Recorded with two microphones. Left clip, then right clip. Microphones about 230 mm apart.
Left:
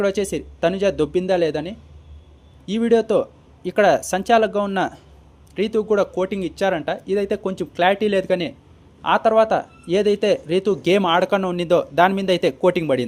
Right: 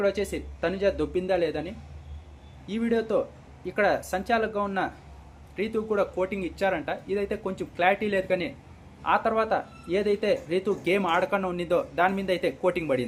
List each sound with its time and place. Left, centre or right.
0.0 s speech: left